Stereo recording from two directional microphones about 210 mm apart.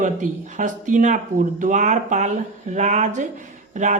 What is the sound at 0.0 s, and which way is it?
Speech, 35° right (ahead or behind).